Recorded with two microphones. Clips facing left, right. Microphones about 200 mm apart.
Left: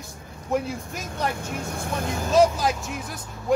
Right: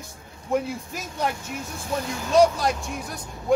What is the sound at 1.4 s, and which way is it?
Speech, 55° left (ahead or behind).